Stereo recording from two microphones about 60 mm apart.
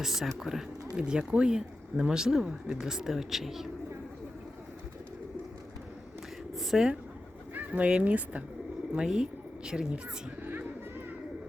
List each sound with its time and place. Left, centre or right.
0.0 s speech: centre
6.6 s speech: centre
7.5 s bird: right
7.9 s speech: right
8.9 s speech: centre